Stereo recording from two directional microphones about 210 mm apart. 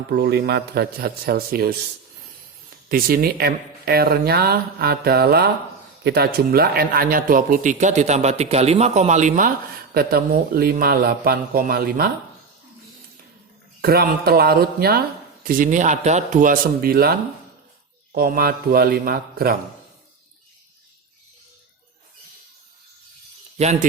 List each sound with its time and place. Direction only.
0.1 s speech: 50° right (ahead or behind)
2.9 s a man's voice: 45° right (ahead or behind)
13.8 s a man's voice: 45° right (ahead or behind)